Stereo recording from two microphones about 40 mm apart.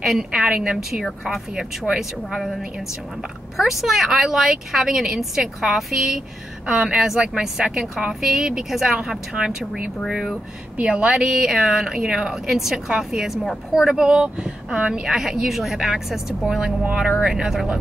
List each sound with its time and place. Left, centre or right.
0.0 s speech: centre
3.5 s speech: centre
6.7 s speech: right
10.8 s speech: right
11.1 s speech: centre; by 15.0 s right
15.0 s speech: centre